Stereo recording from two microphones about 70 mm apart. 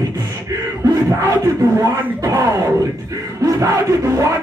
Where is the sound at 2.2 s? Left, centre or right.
Right.